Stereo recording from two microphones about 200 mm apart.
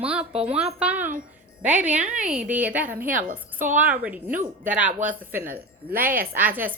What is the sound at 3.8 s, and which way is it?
A woman's voice, 5° right (ahead or behind).